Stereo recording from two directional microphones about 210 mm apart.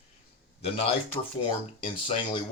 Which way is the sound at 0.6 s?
25° left (ahead or behind).